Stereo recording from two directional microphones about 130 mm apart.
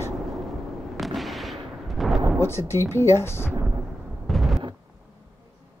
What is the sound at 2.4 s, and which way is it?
Speech, 20° left (ahead or behind).